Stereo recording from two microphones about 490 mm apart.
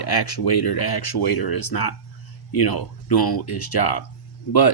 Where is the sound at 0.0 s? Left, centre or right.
Left.